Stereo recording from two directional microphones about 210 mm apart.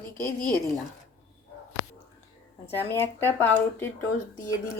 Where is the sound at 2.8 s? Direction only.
10° left (ahead or behind).